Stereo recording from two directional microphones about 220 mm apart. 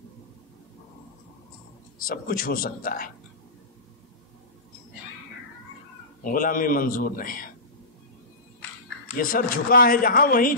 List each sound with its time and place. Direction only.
2.0 s speech: 40° left (ahead or behind)
6.2 s speech: 40° left (ahead or behind)
9.0 s speech: 35° left (ahead or behind)